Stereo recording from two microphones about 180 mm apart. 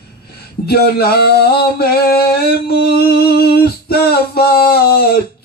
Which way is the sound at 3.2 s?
60° left (ahead or behind).